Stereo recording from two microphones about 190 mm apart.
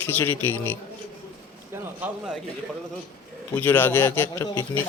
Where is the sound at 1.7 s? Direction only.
10° right (ahead or behind).